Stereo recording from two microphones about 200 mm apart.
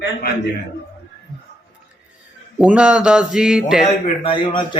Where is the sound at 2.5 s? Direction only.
5° right (ahead or behind).